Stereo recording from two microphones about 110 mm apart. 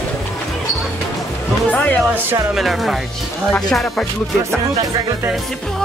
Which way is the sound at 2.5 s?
Centre (ahead or behind).